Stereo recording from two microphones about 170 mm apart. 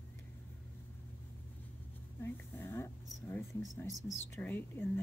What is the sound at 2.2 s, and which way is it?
A woman's voice, 15° left (ahead or behind).